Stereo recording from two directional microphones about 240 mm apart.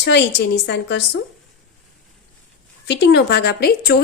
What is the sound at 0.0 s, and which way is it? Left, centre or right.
A woman's voice, left.